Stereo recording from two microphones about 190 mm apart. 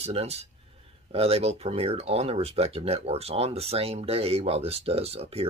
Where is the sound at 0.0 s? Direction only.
35° right (ahead or behind).